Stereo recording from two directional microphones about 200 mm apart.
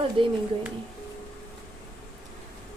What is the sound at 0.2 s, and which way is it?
Speech, 25° right (ahead or behind).